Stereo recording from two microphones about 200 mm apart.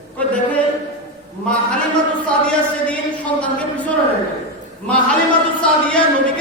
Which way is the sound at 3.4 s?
5° left (ahead or behind).